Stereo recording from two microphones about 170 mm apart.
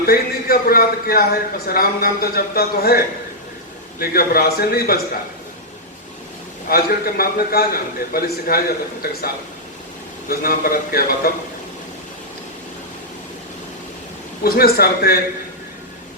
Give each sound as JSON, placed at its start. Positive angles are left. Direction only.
{"t": 0.0, "sound": "a man's voice", "side_deg": 60}
{"t": 4.0, "sound": "a man's voice", "side_deg": 65}
{"t": 6.7, "sound": "a man's voice", "side_deg": 65}
{"t": 14.4, "sound": "a man's voice", "side_deg": 65}